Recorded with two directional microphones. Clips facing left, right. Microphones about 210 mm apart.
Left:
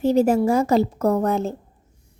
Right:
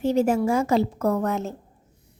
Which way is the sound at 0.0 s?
35° left (ahead or behind).